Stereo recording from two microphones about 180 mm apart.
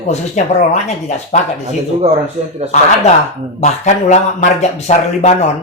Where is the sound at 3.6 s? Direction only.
40° left (ahead or behind).